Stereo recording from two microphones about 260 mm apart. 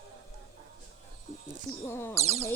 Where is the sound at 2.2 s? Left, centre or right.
Right.